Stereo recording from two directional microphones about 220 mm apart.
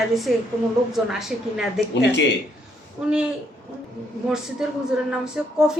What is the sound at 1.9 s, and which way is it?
Speech, 55° left (ahead or behind).